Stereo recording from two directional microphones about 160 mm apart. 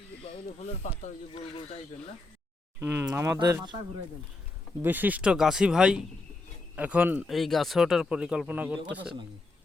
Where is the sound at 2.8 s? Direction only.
10° right (ahead or behind).